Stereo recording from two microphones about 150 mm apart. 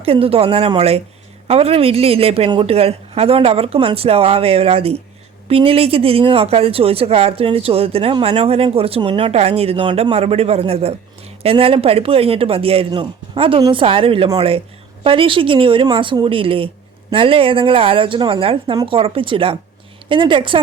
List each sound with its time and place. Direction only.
0.0 s speech: 40° right (ahead or behind)